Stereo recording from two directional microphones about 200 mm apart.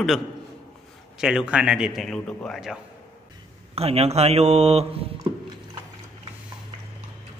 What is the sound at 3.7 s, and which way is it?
Speech, 30° right (ahead or behind).